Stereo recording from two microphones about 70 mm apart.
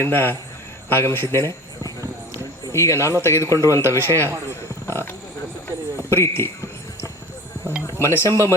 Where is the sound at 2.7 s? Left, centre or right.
Left.